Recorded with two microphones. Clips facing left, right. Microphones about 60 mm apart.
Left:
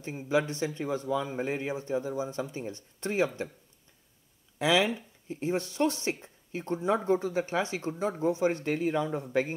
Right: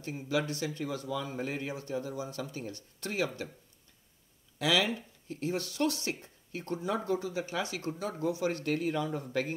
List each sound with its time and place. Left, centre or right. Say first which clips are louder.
0.0 s speech: left 4 dB; left
4.6 s speech: left 3 dB; left